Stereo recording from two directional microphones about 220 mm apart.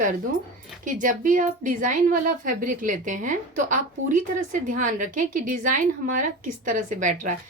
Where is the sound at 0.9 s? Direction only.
35° right (ahead or behind).